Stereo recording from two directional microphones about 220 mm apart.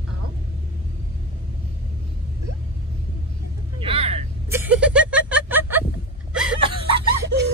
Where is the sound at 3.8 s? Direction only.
25° right (ahead or behind).